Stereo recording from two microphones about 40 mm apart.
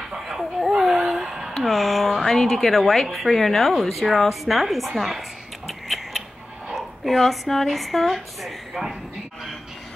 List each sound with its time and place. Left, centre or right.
0.1 s a sound: centre
3.1 s a woman's voice: centre
5.7 s tick-tock: centre
6.7 s speech: centre